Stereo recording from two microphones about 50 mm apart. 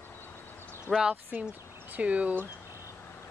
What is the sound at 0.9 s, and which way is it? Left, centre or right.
Speech, left.